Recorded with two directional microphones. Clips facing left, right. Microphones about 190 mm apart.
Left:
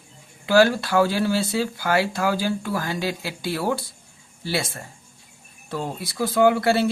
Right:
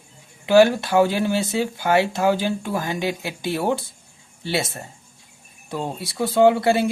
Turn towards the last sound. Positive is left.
turn(degrees=-20)  # may be behind; listen again after turning